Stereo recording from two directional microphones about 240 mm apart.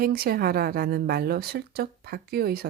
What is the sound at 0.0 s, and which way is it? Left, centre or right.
Speech, right.